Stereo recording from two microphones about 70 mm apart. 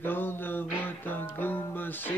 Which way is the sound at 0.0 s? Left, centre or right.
Left.